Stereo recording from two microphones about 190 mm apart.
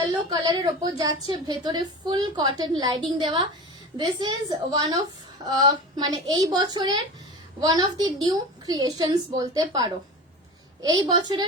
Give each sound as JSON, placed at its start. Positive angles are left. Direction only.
{"t": 0.1, "sound": "a woman's voice", "side_deg": -20}